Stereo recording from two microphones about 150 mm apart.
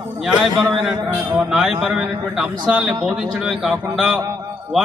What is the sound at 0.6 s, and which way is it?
A man's voice, centre (ahead or behind).